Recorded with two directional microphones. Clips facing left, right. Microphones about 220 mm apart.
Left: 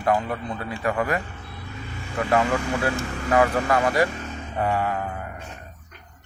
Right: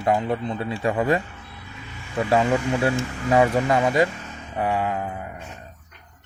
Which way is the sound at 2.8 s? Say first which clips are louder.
Right 2 dB; 25° right (ahead or behind).